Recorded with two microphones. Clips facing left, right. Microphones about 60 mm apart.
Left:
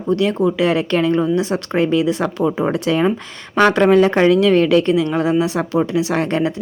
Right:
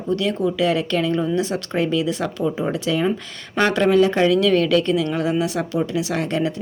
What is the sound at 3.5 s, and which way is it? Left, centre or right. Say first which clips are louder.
A woman's voice: left 4 dB; left.